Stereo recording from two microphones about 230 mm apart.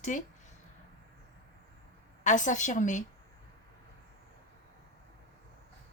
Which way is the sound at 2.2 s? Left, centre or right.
Left.